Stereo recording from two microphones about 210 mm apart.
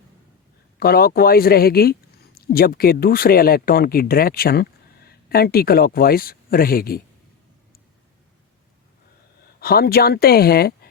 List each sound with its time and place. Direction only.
0.8 s speech: 45° left (ahead or behind)
9.6 s speech: 45° left (ahead or behind)